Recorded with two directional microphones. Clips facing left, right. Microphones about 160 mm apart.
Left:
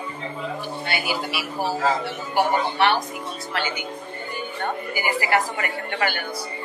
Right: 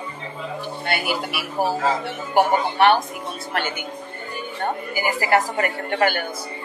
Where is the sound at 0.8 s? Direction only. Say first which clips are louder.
Right 3 dB; 55° right (ahead or behind).